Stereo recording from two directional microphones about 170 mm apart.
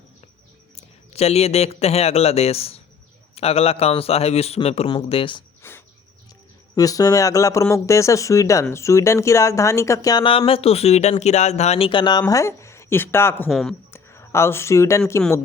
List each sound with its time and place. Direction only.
0.8 s a man's voice: 40° left (ahead or behind)
5.6 s insect: 15° left (ahead or behind)
6.7 s speech: 20° left (ahead or behind)
13.5 s speech: centre (ahead or behind)
13.9 s speech: 15° left (ahead or behind)